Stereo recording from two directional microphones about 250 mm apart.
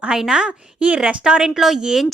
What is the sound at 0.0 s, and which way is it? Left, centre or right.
A woman's voice, centre.